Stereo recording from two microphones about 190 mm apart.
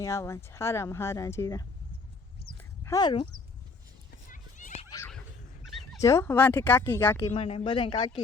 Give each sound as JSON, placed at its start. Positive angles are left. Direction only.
{"t": 0.0, "sound": "speech", "side_deg": 15}
{"t": 2.6, "sound": "dog", "side_deg": 15}
{"t": 4.3, "sound": "horse", "side_deg": 40}
{"t": 4.9, "sound": "neigh", "side_deg": 15}
{"t": 6.0, "sound": "speech", "side_deg": 15}
{"t": 7.3, "sound": "speech", "side_deg": 30}